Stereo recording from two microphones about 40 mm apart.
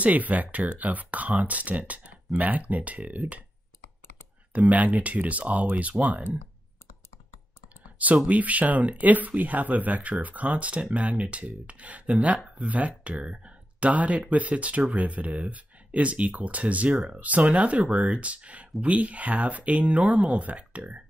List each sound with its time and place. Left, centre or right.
0.0 s speech: right
4.5 s speech: right
8.3 s speech: right